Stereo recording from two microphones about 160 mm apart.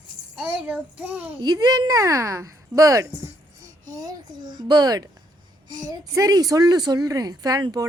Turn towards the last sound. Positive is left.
turn(degrees=-25)  # may be behind; listen again after turning